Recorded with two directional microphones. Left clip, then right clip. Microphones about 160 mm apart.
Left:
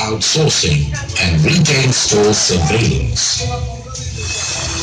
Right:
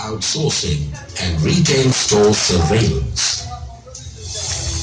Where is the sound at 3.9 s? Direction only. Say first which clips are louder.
Left 7 dB; 45° right (ahead or behind).